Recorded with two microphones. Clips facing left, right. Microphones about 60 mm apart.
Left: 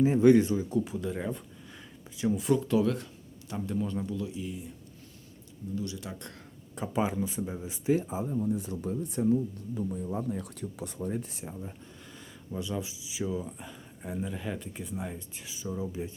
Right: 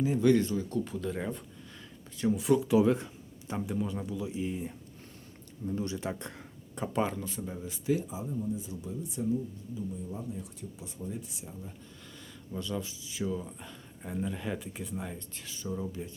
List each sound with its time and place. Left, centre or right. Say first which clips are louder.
0.0 s speech: left 4 dB; left; by 2.6 s centre
2.6 s speech: right 2 dB; centre
3.7 s a man's voice: left 4 dB; centre
4.3 s speech: right 3 dB; right
6.7 s speech: left 2 dB; centre; by 7.9 s left
7.9 s speech: left 5 dB; left
8.4 s speech: left 5 dB; left
12.5 s speech: left 1 dB; centre
15.9 s speech: left 3 dB; centre